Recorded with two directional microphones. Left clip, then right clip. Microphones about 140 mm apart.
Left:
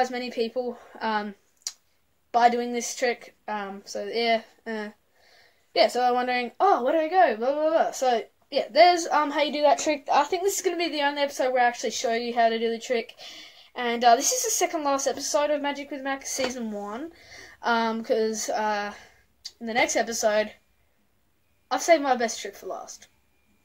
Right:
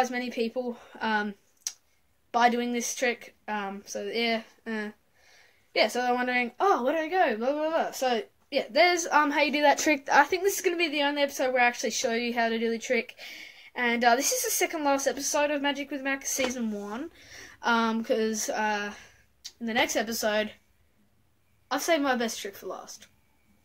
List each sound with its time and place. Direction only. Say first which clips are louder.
0.0 s a woman's voice: left 2 dB; 10° right (ahead or behind)
9.4 s a woman's voice: left 1 dB; 40° right (ahead or behind)
10.5 s a woman's voice: even; 20° right (ahead or behind)
21.6 s a woman's voice: left 5 dB; 15° right (ahead or behind)